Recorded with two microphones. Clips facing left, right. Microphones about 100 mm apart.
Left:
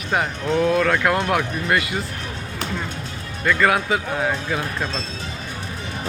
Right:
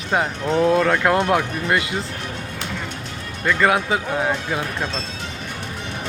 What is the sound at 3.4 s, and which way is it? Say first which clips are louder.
Speech: even; 20° right (ahead or behind).